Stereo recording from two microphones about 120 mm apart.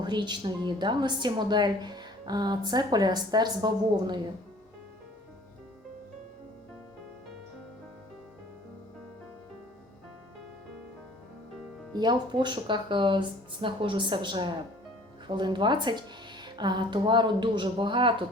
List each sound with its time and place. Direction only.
0.0 s a woman's voice: 40° right (ahead or behind)
11.9 s a woman's voice: 40° right (ahead or behind)